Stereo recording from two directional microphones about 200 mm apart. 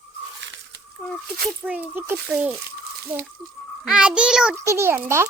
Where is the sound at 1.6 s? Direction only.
10° right (ahead or behind).